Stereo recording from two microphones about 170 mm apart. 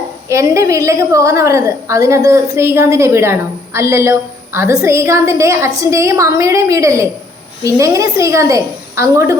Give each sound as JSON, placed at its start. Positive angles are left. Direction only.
{"t": 0.3, "sound": "a woman's voice", "side_deg": -15}